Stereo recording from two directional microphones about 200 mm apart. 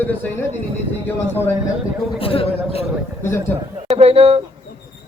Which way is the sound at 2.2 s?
30° left (ahead or behind).